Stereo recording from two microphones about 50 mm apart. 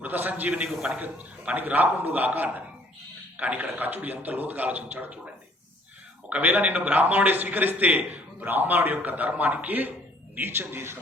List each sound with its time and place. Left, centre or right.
0.0 s a man's voice: right
0.7 s a man's voice: centre
0.9 s a man's voice: right
6.2 s a man's voice: right